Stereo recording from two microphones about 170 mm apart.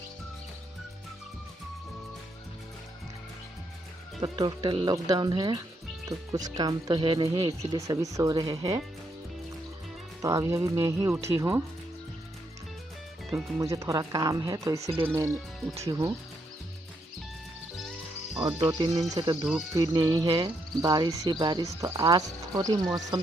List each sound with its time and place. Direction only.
4.2 s speech: 25° right (ahead or behind)
7.6 s speech: 20° right (ahead or behind)
10.2 s speech: 20° right (ahead or behind)
13.6 s speech: 20° right (ahead or behind)
14.8 s speech: 35° right (ahead or behind)
15.0 s speech: 15° right (ahead or behind)
18.4 s speech: 25° right (ahead or behind)